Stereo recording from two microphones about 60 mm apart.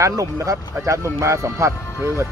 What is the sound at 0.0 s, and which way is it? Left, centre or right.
Speech, right.